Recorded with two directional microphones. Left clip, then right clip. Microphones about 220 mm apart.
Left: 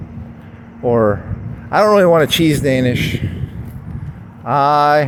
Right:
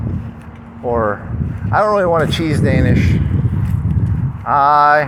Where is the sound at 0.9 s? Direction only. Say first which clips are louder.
Left 3 dB; 60° left (ahead or behind).